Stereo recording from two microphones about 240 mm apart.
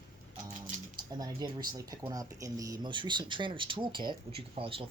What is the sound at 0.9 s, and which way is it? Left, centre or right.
Speech, centre.